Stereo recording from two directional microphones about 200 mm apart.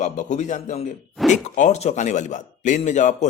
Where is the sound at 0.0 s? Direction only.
35° left (ahead or behind).